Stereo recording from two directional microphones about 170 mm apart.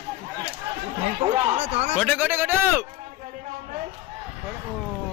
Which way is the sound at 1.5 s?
40° right (ahead or behind).